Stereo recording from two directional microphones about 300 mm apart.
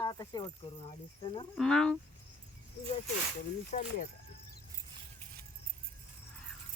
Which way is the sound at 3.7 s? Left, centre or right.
Left.